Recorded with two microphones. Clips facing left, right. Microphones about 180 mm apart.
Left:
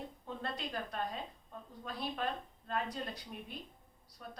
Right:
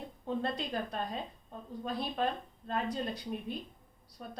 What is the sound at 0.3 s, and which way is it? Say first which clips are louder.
A woman's voice: right 8 dB; 25° right (ahead or behind).